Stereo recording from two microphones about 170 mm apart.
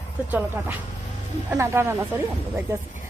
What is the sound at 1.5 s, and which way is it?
A woman's voice, 15° right (ahead or behind).